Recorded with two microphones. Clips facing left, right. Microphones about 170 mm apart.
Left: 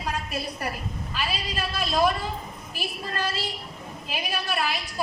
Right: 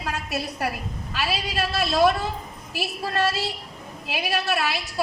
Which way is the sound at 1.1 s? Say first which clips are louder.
Right 4 dB; 75° right (ahead or behind).